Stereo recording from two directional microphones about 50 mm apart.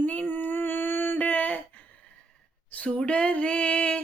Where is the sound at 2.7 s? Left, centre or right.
Left.